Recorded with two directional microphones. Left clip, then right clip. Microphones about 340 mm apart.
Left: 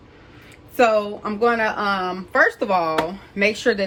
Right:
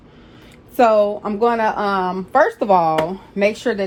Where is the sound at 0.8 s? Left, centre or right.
Centre.